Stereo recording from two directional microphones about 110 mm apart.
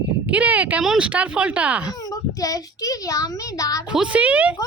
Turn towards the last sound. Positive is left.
turn(degrees=-10)  # may be behind; listen again after turning